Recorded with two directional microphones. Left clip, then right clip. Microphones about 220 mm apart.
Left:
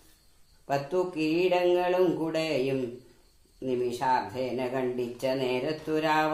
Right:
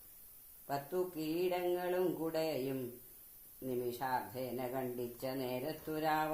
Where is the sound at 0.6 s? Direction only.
45° right (ahead or behind).